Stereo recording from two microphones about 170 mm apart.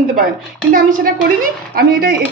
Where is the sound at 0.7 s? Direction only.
55° right (ahead or behind).